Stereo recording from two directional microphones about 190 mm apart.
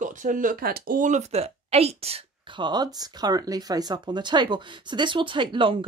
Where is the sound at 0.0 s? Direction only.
40° right (ahead or behind).